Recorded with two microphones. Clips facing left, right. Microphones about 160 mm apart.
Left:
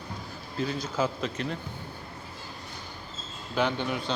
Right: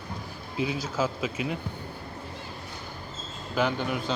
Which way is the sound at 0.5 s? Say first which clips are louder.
Right 1 dB; 10° right (ahead or behind).